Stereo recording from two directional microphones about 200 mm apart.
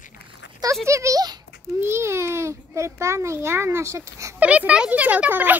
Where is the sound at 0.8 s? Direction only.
15° right (ahead or behind).